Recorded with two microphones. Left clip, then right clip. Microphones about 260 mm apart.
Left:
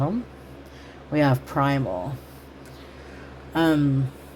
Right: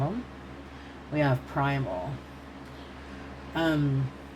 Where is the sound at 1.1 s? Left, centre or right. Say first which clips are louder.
Left 6 dB; left.